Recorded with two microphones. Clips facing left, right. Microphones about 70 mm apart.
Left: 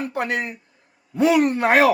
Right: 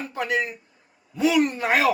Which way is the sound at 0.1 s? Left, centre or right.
Left.